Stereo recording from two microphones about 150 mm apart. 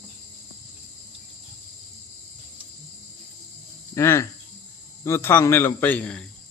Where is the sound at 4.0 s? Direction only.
20° left (ahead or behind).